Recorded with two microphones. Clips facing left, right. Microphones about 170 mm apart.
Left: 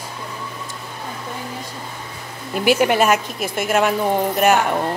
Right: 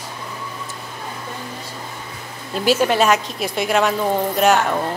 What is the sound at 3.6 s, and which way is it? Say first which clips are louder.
Speech: even; 10° left (ahead or behind).